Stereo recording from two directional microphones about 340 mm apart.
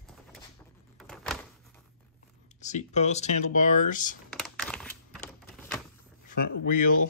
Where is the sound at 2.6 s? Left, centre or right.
Left.